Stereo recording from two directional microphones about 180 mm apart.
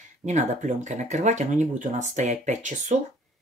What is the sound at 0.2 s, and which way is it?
Speech, 40° right (ahead or behind).